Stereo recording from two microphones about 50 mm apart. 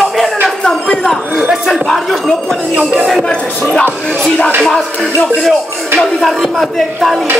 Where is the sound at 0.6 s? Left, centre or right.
Centre.